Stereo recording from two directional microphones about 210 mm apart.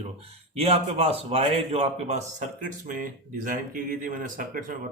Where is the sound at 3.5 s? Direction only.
40° right (ahead or behind).